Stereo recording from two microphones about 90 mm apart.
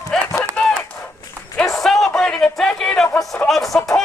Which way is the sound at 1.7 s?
Centre (ahead or behind).